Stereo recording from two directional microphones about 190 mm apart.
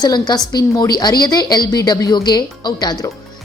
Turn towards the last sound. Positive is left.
turn(degrees=20)  # may be behind; listen again after turning